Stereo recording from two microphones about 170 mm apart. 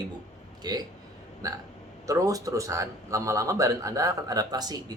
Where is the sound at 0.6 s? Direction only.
25° right (ahead or behind).